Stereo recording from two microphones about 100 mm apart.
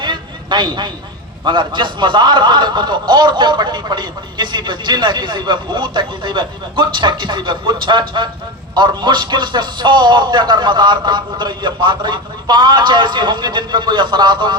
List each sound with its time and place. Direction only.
0.0 s vehicle: 50° right (ahead or behind)
1.5 s speech: 50° right (ahead or behind)